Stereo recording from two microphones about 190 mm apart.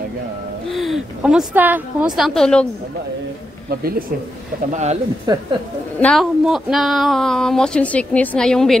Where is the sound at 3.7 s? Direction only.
50° right (ahead or behind).